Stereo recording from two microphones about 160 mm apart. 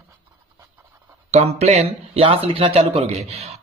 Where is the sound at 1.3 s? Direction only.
40° right (ahead or behind).